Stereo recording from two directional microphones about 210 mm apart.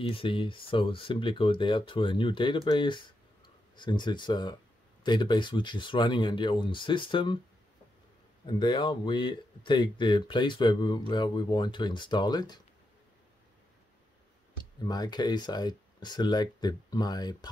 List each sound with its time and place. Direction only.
0.0 s speech: 25° left (ahead or behind)
8.5 s speech: 20° left (ahead or behind)
14.6 s speech: 20° left (ahead or behind)